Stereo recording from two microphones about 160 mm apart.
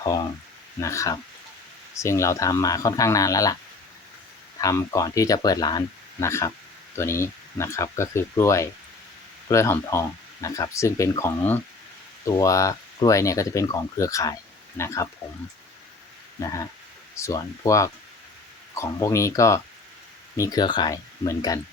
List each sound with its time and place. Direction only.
0.0 s speech: 25° left (ahead or behind)
4.6 s speech: 20° left (ahead or behind)
16.4 s speech: 20° left (ahead or behind)